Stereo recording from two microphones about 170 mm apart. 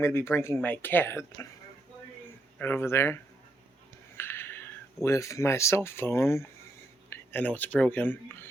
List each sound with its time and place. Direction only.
0.0 s speech: 15° left (ahead or behind)
2.6 s speech: 10° left (ahead or behind)
4.2 s a sound: 15° left (ahead or behind)
5.0 s speech: 20° left (ahead or behind)